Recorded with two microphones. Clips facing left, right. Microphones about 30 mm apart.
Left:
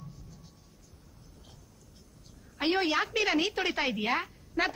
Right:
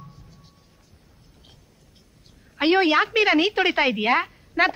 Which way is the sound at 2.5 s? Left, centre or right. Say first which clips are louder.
Right 9 dB; right.